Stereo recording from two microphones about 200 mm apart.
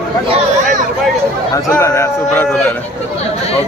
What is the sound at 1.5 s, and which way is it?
Speech, 15° left (ahead or behind).